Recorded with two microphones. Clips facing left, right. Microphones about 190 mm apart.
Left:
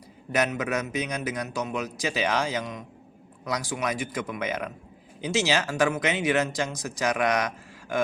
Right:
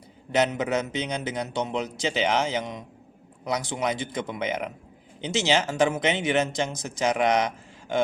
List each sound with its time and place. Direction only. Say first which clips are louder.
0.3 s speech: right 2 dB; 25° right (ahead or behind)